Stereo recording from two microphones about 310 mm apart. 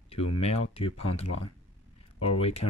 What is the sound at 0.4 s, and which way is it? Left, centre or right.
Speech, centre.